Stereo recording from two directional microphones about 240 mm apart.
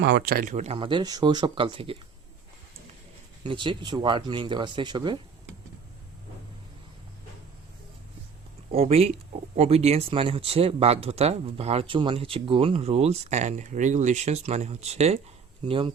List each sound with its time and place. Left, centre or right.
0.0 s speech: right
3.4 s speech: centre
8.7 s speech: right